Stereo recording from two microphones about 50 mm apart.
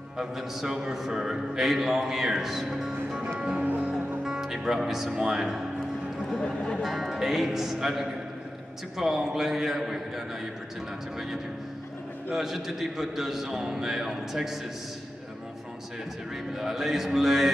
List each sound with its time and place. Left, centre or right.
0.2 s a man's voice: centre
3.6 s music: right
4.2 s music: centre
5.1 s speech: centre
6.4 s speech: centre
6.8 s a man's voice: centre
16.5 s a man's voice: centre